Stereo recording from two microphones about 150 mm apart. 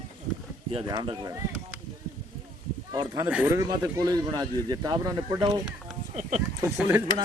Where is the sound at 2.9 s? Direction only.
25° right (ahead or behind).